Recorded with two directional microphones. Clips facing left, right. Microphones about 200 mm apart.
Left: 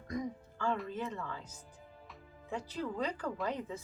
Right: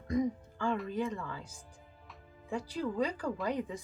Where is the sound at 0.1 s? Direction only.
25° right (ahead or behind).